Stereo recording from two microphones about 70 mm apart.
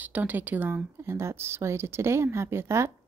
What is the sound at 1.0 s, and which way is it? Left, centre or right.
A woman's voice, right.